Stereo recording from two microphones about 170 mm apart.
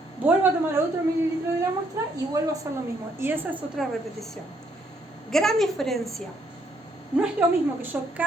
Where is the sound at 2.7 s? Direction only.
15° right (ahead or behind).